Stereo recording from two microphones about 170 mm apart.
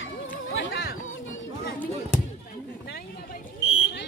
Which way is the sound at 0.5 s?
80° left.